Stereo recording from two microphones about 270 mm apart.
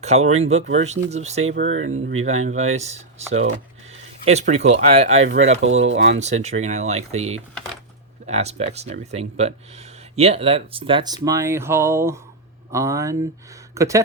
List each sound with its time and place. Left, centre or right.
0.0 s speech: right
5.6 s speech: right
6.1 s speech: right